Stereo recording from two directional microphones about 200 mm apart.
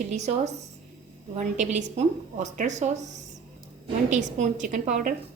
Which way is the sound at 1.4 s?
40° right (ahead or behind).